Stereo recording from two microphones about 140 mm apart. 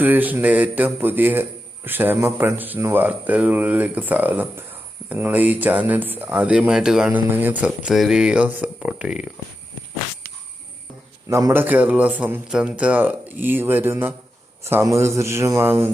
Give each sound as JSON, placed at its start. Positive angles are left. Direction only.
{"t": 0.0, "sound": "a man's voice", "side_deg": -10}
{"t": 11.3, "sound": "a man's voice", "side_deg": -20}